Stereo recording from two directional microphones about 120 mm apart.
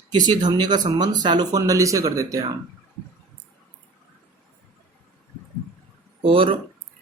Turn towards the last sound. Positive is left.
turn(degrees=-50)  # may be behind; listen again after turning